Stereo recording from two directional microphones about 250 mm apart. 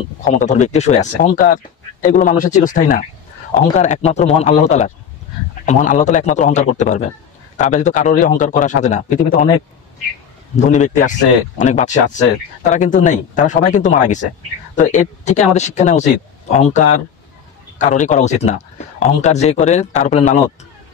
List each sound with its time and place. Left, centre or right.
0.2 s speech: left
10.5 s speech: left
17.7 s speech: left